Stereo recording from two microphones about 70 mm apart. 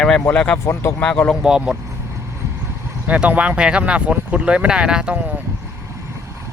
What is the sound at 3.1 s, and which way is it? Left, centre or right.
Speech, centre.